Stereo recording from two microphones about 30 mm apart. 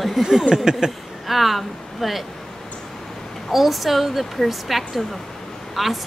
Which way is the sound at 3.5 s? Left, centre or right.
Centre.